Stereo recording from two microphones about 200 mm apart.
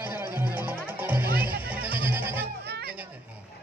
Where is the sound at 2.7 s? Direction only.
50° right (ahead or behind).